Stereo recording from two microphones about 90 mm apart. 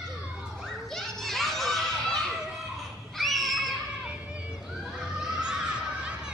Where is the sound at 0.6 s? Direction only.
5° left (ahead or behind).